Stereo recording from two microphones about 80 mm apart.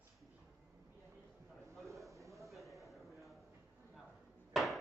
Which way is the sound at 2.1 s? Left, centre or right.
Right.